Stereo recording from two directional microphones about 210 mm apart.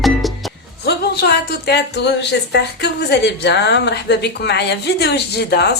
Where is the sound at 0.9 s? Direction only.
50° left (ahead or behind).